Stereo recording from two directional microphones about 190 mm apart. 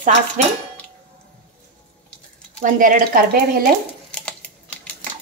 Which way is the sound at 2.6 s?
45° right (ahead or behind).